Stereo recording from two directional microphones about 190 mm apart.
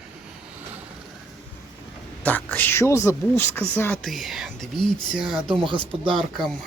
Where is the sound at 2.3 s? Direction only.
10° left (ahead or behind).